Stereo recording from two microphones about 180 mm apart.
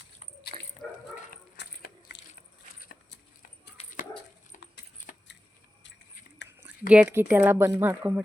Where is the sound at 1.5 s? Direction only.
75° left (ahead or behind).